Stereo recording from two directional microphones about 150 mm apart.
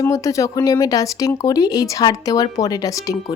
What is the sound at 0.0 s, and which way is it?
Speech, 20° left (ahead or behind).